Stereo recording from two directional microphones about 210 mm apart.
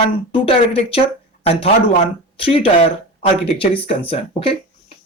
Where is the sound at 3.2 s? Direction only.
25° left (ahead or behind).